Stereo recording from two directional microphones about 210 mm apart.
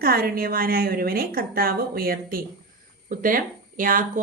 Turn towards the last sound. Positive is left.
turn(degrees=-40)  # may be behind; listen again after turning